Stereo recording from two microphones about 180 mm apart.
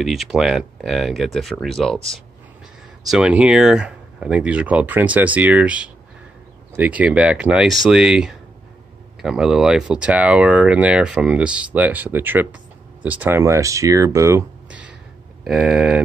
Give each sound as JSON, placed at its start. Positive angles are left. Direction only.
{"t": 0.0, "sound": "speech", "side_deg": 0}
{"t": 3.1, "sound": "speech", "side_deg": -5}